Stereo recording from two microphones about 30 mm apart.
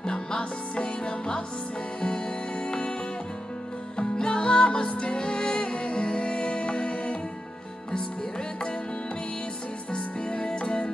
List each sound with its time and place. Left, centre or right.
0.0 s music: left
4.0 s music: left
9.9 s music: left